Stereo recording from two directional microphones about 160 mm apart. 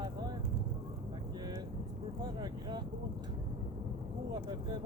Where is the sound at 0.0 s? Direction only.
25° right (ahead or behind).